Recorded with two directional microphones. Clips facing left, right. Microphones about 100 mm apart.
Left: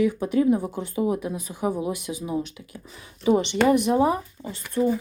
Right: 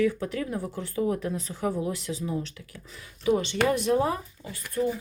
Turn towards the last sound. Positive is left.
turn(degrees=25)  # may be behind; listen again after turning